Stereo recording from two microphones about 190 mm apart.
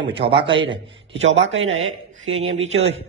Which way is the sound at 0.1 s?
30° right (ahead or behind).